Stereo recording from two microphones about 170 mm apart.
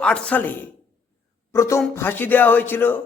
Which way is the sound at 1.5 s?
15° left (ahead or behind).